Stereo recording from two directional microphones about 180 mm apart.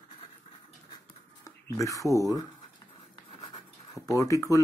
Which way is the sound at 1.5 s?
15° left (ahead or behind).